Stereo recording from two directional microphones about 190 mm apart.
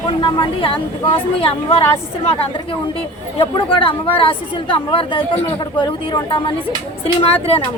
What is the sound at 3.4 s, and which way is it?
A woman's voice, 30° left (ahead or behind).